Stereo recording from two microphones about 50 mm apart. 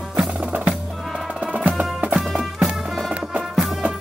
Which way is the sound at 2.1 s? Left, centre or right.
Centre.